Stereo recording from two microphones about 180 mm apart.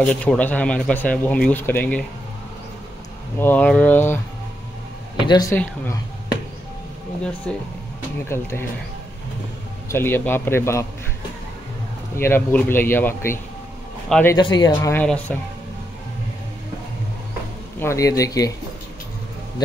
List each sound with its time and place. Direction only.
0.0 s speech: 5° left (ahead or behind)
3.3 s speech: 10° left (ahead or behind)
5.2 s speech: 20° left (ahead or behind)
7.5 s speech: 5° left (ahead or behind)
9.8 s speech: 10° left (ahead or behind)
12.2 s a man's voice: 10° left (ahead or behind)
14.3 s speech: 25° left (ahead or behind); by 15.3 s 10° left (ahead or behind)
17.7 s speech: 15° left (ahead or behind)